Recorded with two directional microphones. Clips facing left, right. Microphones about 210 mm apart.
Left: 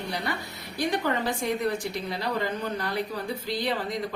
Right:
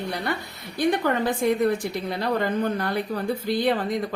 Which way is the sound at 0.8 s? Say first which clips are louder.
Right 4 dB; 55° right (ahead or behind).